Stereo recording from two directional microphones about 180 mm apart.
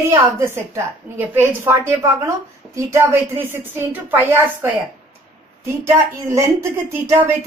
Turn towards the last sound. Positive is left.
turn(degrees=-15)  # may be behind; listen again after turning